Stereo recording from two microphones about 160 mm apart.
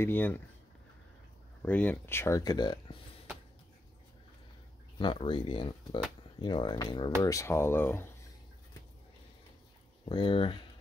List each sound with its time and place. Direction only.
0.0 s speech: 10° left (ahead or behind)
1.6 s speech: 10° left (ahead or behind); by 3.0 s 25° left (ahead or behind)
4.9 s speech: 30° left (ahead or behind); by 8.1 s 15° left (ahead or behind)
10.0 s speech: 35° left (ahead or behind)